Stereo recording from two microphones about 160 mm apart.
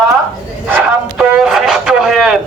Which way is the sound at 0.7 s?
5° right (ahead or behind).